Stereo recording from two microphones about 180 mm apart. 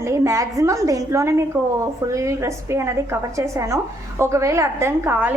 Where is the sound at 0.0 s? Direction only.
15° right (ahead or behind).